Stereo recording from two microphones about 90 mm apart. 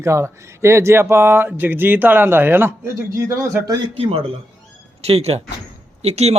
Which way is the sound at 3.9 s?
90° right.